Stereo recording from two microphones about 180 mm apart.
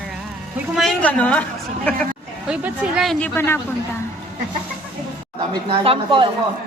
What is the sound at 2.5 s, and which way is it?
Speech, 5° right (ahead or behind).